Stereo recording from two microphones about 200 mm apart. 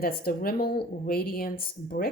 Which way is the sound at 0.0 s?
50° left (ahead or behind).